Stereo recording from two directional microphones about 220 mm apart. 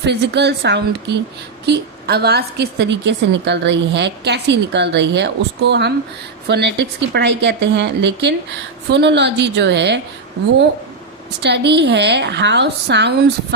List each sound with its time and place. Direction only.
0.0 s a woman's voice: 50° right (ahead or behind)
11.4 s a woman's voice: 50° right (ahead or behind)